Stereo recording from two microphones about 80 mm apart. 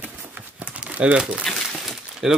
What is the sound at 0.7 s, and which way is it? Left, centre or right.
Crumpling, centre.